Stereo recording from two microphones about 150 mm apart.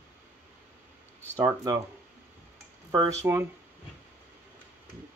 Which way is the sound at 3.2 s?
15° right (ahead or behind).